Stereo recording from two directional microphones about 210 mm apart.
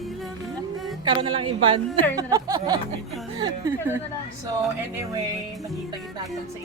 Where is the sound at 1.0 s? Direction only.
25° right (ahead or behind).